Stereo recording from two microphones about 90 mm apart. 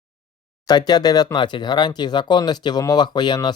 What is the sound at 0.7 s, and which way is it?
Speech, 50° left (ahead or behind).